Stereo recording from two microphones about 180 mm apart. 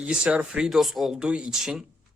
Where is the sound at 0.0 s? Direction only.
5° right (ahead or behind).